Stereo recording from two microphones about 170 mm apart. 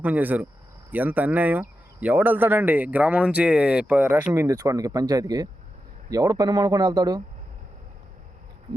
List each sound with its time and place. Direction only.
0.0 s speech: 10° right (ahead or behind)